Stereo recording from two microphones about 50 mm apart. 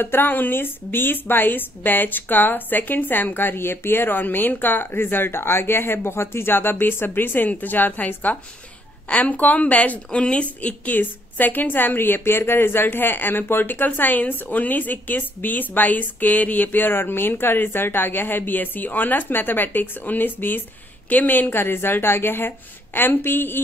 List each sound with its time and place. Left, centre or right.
0.0 s a woman's voice: left
11.0 s a woman's voice: left